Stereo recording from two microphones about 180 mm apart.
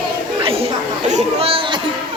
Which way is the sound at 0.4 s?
30° right (ahead or behind).